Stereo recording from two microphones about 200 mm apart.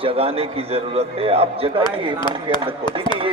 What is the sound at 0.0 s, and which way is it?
A man's voice, 30° right (ahead or behind).